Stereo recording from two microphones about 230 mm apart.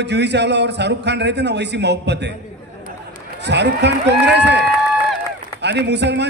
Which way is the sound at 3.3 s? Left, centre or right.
Right.